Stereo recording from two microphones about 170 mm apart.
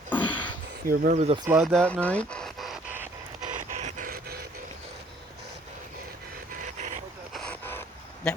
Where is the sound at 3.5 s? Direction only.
45° right (ahead or behind).